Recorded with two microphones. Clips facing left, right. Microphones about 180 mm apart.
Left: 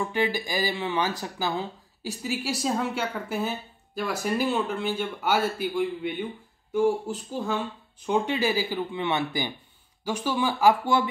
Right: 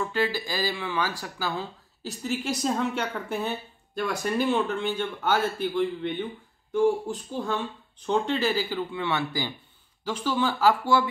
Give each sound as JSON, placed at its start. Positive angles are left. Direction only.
{"t": 0.0, "sound": "speech", "side_deg": 15}
{"t": 2.2, "sound": "speech", "side_deg": 5}